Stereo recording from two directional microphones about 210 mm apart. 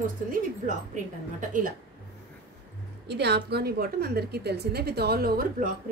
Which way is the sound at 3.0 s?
55° right (ahead or behind).